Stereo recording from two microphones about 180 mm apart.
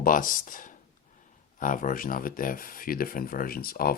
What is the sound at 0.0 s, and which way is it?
Speech, 50° left (ahead or behind).